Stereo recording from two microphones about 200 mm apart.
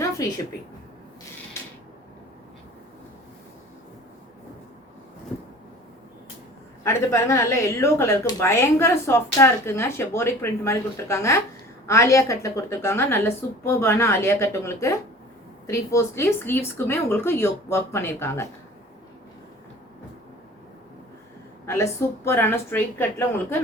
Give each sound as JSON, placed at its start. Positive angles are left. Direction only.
{"t": 0.0, "sound": "a sound", "side_deg": 15}
{"t": 6.8, "sound": "speech", "side_deg": 15}
{"t": 21.7, "sound": "speech", "side_deg": 15}